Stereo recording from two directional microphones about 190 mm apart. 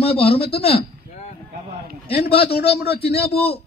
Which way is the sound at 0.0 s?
30° left (ahead or behind).